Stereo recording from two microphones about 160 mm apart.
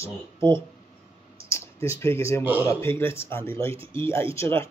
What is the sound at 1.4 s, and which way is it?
Speech, 20° left (ahead or behind).